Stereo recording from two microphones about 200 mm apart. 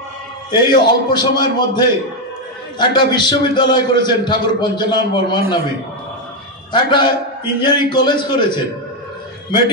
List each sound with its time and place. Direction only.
0.5 s a man's voice: 20° left (ahead or behind)
6.7 s a man's voice: 25° left (ahead or behind)